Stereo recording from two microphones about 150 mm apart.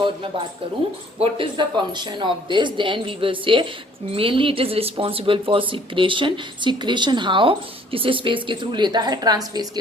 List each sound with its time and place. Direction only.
0.0 s a woman's voice: 35° right (ahead or behind)